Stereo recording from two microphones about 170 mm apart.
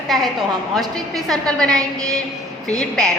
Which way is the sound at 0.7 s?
Centre (ahead or behind).